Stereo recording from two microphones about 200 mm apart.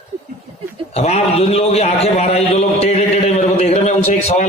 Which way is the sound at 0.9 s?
30° left (ahead or behind).